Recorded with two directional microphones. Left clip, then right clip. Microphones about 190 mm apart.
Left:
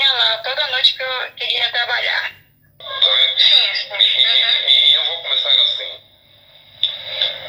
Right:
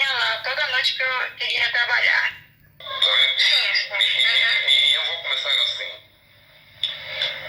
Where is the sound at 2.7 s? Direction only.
40° left (ahead or behind).